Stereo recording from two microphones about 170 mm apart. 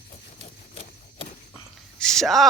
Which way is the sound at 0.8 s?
35° left (ahead or behind).